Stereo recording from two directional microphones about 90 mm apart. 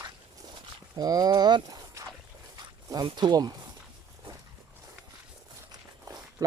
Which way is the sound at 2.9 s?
50° right (ahead or behind).